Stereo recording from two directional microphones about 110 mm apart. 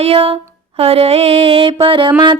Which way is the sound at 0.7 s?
60° right (ahead or behind).